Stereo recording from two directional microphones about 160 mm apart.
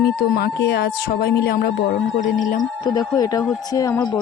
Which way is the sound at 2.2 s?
55° left (ahead or behind).